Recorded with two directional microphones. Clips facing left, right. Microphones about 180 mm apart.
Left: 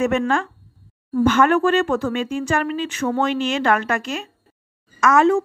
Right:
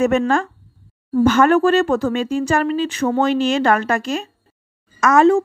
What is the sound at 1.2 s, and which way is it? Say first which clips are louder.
Speech: right 3 dB; 40° right (ahead or behind).